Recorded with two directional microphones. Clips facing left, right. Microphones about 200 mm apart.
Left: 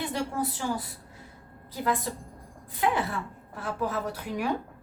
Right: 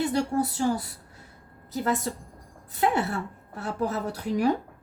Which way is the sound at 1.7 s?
45° right (ahead or behind).